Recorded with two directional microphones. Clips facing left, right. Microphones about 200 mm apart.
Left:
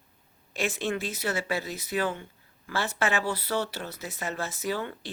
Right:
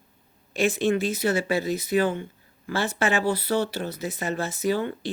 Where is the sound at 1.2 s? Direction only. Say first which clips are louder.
Right 6 dB; 15° right (ahead or behind).